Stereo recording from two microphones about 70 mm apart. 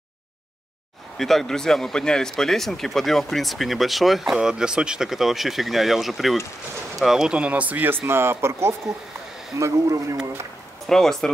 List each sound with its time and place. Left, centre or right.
1.1 s speech: centre; by 10.1 s right
10.9 s speech: centre